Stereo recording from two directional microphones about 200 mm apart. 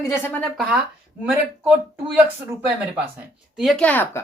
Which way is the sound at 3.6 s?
Centre (ahead or behind).